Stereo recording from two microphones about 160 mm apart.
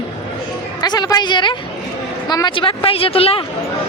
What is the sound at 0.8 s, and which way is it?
A woman's voice, 25° left (ahead or behind).